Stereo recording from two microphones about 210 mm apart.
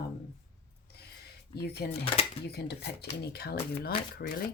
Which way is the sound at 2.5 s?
50° left (ahead or behind).